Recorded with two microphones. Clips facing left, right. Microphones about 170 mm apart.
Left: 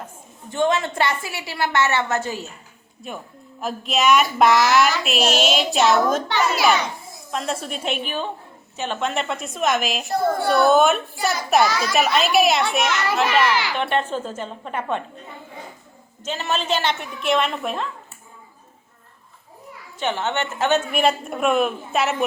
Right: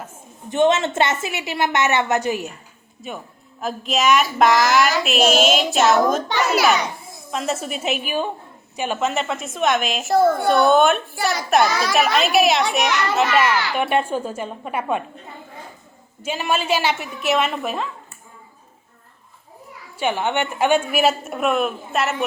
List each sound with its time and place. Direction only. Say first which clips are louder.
0.5 s a woman's voice: right 4 dB; 20° right (ahead or behind)
3.0 s a woman's voice: right 1 dB; centre (ahead or behind)
16.2 s a woman's voice: right 2 dB; 10° right (ahead or behind)
20.0 s a woman's voice: right 2 dB; 10° right (ahead or behind)